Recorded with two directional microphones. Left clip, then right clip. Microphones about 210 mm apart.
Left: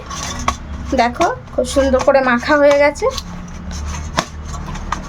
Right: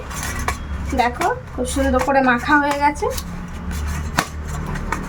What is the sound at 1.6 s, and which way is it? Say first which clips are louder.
Speech: left 5 dB; 55° left (ahead or behind).